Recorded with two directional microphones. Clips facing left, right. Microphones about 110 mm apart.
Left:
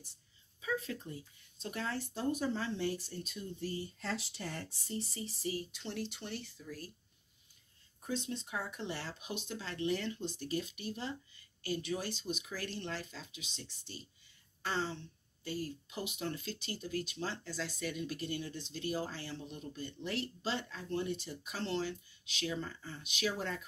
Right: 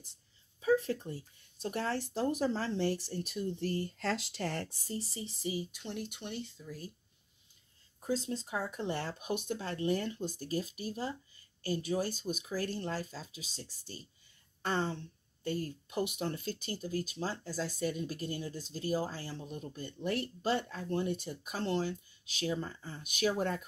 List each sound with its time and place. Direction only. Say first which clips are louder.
1.1 s speech: right 4 dB; 40° right (ahead or behind)
1.7 s speech: right 5 dB; 60° right (ahead or behind)
2.1 s speech: right 2 dB; 40° right (ahead or behind)
3.5 s speech: right 5 dB; 65° right (ahead or behind)
4.8 s speech: right 1 dB; 30° right (ahead or behind)
5.6 s speech: right 1 dB; 10° right (ahead or behind)
8.3 s speech: right 4 dB; 35° right (ahead or behind)
14.6 s speech: right 3 dB; 50° right (ahead or behind)